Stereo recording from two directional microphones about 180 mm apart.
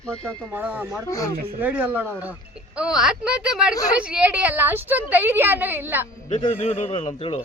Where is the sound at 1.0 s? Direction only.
20° left (ahead or behind).